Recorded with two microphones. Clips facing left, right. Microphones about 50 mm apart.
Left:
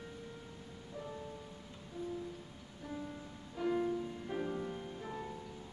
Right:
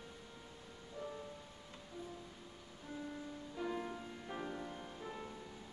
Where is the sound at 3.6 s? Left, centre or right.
Centre.